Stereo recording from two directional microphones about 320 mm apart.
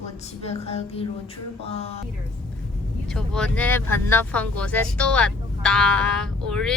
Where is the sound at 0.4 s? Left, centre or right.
Centre.